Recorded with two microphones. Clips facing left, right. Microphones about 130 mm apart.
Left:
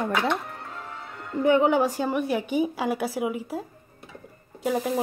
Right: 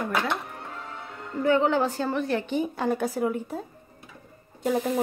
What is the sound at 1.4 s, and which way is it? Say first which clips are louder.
A woman's voice: left 2 dB; 15° left (ahead or behind).